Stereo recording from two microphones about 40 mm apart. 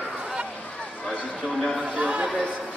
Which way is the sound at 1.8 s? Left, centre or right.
Right.